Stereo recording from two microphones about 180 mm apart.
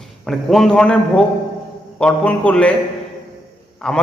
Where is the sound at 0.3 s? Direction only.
Centre (ahead or behind).